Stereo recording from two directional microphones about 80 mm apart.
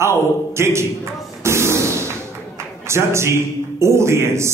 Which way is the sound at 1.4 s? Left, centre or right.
Right.